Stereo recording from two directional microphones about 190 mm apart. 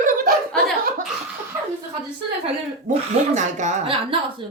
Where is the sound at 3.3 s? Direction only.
40° right (ahead or behind).